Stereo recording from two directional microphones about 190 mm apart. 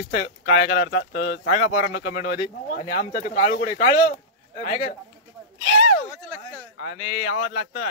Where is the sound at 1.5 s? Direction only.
45° left (ahead or behind).